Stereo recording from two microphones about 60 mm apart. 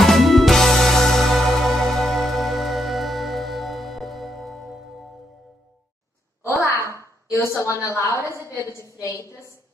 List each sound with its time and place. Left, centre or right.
0.0 s music: centre
6.4 s a sound: left
7.0 s a woman's voice: left